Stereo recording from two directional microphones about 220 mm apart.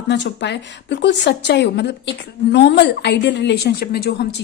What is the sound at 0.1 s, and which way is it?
A woman's voice, 50° left (ahead or behind).